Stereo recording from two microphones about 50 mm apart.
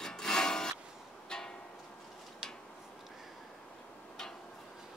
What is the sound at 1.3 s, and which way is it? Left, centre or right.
Music, centre.